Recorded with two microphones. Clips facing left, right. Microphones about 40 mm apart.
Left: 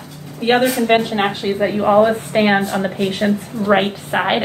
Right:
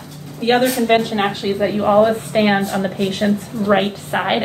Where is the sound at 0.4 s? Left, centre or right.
Centre.